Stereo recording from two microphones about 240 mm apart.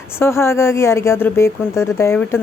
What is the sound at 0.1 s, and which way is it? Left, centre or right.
Speech, centre.